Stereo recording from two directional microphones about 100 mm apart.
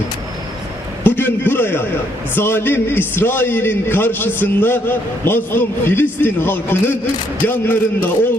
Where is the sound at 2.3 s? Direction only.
20° left (ahead or behind).